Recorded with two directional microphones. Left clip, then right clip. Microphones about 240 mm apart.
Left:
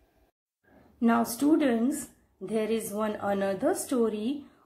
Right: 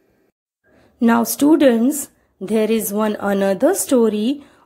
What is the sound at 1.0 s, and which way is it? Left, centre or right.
A woman's voice, right.